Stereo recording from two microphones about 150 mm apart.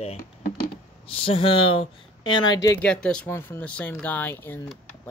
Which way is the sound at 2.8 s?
5° left (ahead or behind).